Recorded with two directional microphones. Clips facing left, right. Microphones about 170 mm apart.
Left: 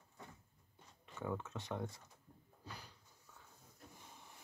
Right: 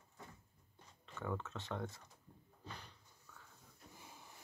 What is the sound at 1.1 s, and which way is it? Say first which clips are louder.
Speech: left 1 dB; 10° left (ahead or behind).